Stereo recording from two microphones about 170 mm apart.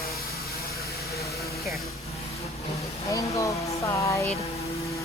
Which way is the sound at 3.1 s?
20° left (ahead or behind).